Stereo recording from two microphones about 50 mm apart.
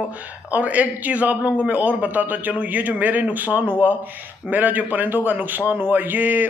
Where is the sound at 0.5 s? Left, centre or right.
Right.